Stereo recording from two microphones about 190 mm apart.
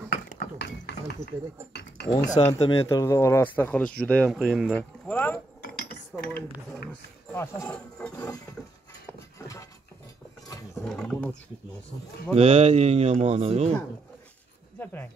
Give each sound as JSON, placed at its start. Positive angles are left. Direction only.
{"t": 0.3, "sound": "mechanisms", "side_deg": 45}
{"t": 2.0, "sound": "speech", "side_deg": 30}
{"t": 2.8, "sound": "speech", "side_deg": 15}
{"t": 7.3, "sound": "speech", "side_deg": 15}
{"t": 7.7, "sound": "speech", "side_deg": 5}
{"t": 10.7, "sound": "speech", "side_deg": 0}
{"t": 12.4, "sound": "speech", "side_deg": -35}
{"t": 14.8, "sound": "speech", "side_deg": 10}